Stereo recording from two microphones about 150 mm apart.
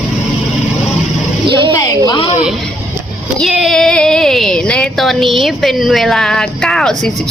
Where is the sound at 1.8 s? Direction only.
25° left (ahead or behind).